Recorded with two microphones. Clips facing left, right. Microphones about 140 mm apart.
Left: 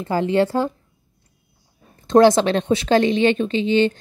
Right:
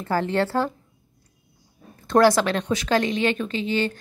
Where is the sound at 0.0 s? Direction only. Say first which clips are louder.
Left 4 dB; 15° left (ahead or behind).